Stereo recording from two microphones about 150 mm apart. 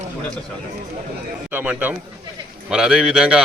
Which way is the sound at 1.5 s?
10° right (ahead or behind).